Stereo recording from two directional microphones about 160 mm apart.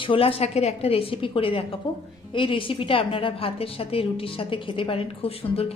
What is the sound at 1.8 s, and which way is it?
A woman's voice, 25° left (ahead or behind).